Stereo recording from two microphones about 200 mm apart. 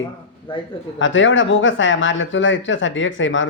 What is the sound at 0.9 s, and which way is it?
Speech, 70° left (ahead or behind).